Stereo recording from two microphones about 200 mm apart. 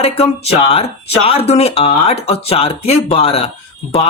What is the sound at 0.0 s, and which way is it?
Speech, 30° left (ahead or behind).